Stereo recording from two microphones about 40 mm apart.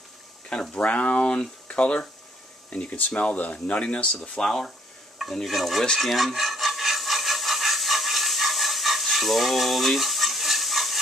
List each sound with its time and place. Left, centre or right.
0.7 s speech: left
4.2 s speech: centre
5.5 s stir: centre
5.9 s wood: centre